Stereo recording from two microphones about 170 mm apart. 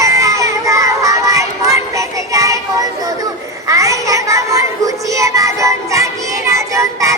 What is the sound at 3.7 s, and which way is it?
Child singing, 20° right (ahead or behind).